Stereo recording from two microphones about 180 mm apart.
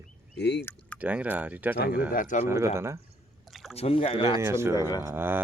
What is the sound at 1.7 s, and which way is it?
Speech, 60° left (ahead or behind).